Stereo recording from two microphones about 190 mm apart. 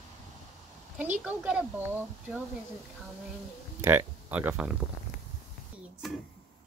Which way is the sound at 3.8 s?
15° right (ahead or behind).